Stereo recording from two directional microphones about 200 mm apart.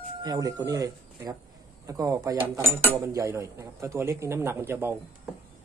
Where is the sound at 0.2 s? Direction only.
20° right (ahead or behind).